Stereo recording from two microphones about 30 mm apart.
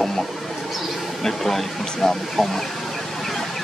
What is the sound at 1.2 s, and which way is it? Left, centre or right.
Speech, centre.